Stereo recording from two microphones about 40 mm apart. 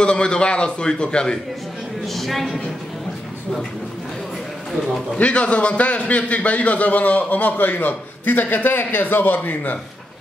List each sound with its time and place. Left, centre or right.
0.0 s a man's voice: left
2.1 s speech: centre
5.1 s a man's voice: left